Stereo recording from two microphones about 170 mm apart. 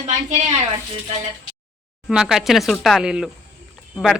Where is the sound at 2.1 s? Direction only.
5° right (ahead or behind).